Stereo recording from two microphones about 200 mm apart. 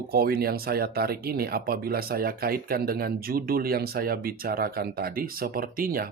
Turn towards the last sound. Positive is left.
turn(degrees=-45)  # may be behind; listen again after turning